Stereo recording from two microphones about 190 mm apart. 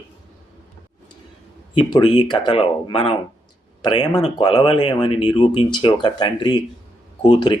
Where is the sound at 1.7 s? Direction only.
25° left (ahead or behind).